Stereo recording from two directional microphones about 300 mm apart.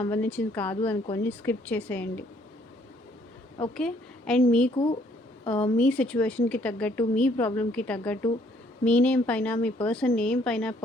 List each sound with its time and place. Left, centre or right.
0.0 s speech: centre
3.8 s speech: centre
4.7 s speech: centre
5.7 s speech: centre